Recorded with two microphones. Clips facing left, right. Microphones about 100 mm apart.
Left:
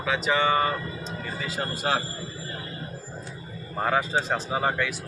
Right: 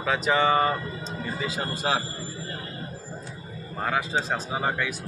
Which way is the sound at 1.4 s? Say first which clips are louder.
Even; 15° right (ahead or behind).